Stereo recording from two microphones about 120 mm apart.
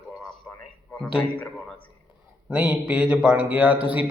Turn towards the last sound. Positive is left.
turn(degrees=-10)  # may be behind; listen again after turning